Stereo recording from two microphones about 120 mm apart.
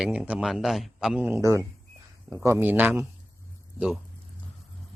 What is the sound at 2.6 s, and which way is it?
Speech, 15° right (ahead or behind).